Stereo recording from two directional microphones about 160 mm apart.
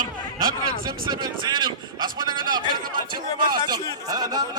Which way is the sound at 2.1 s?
25° right (ahead or behind).